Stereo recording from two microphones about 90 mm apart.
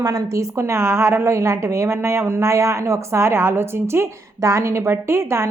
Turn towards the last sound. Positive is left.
turn(degrees=-30)  # may be behind; listen again after turning